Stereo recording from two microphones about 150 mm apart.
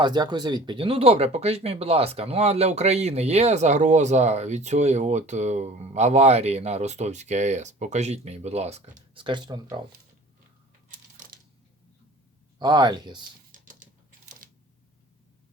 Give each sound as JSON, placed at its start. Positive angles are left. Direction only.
{"t": 0.0, "sound": "speech", "side_deg": -30}
{"t": 9.2, "sound": "speech", "side_deg": -30}
{"t": 10.8, "sound": "coin", "side_deg": -65}
{"t": 12.5, "sound": "speech", "side_deg": -30}
{"t": 13.5, "sound": "a sound", "side_deg": -60}
{"t": 14.4, "sound": "camera", "side_deg": -70}